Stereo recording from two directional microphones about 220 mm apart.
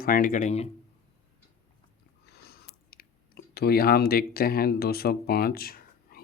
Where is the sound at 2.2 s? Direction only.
45° left (ahead or behind).